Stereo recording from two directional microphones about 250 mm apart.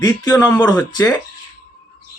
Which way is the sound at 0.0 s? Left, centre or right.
Centre.